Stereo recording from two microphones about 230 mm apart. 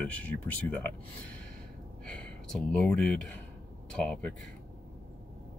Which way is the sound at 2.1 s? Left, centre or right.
Centre.